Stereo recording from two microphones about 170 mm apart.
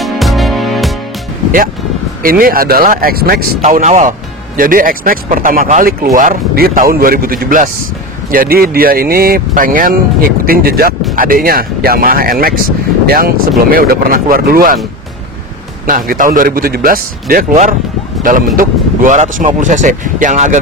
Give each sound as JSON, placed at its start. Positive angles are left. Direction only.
{"t": 0.0, "sound": "music", "side_deg": 0}
{"t": 2.2, "sound": "speech", "side_deg": -60}
{"t": 15.9, "sound": "speech", "side_deg": -55}